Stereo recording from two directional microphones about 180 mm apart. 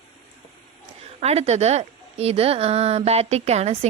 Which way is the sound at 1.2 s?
35° right (ahead or behind).